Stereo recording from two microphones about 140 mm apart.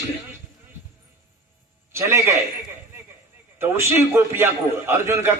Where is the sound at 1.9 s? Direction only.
20° right (ahead or behind).